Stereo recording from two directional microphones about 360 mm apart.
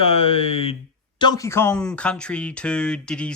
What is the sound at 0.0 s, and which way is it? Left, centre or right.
Speech, centre.